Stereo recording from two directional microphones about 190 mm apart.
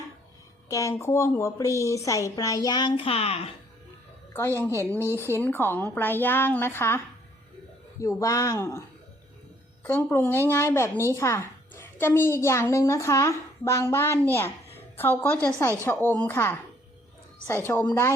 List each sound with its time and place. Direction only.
0.7 s a woman's voice: 15° left (ahead or behind); by 3.5 s 30° left (ahead or behind)
4.9 s speech: 10° right (ahead or behind)
5.3 s a woman's voice: 10° left (ahead or behind)
9.8 s a woman's voice: 10° left (ahead or behind)